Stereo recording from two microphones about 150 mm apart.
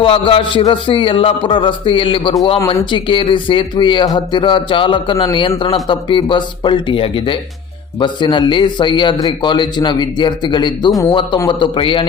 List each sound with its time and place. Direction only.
0.0 s speech: 35° left (ahead or behind)